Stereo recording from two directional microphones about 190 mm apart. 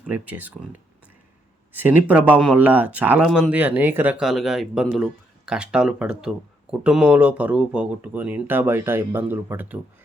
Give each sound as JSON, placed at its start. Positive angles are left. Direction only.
{"t": 0.0, "sound": "speech", "side_deg": -10}
{"t": 1.7, "sound": "speech", "side_deg": -10}